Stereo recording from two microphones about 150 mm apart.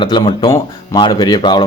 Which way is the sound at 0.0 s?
30° left (ahead or behind).